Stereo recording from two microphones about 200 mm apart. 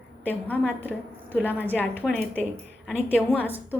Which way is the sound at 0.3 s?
10° left (ahead or behind).